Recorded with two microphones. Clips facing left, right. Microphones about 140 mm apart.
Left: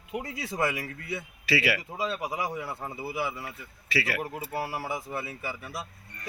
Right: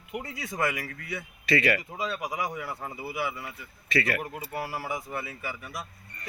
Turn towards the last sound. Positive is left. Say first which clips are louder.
# left 1 dB
turn(degrees=25)  # may be behind; listen again after turning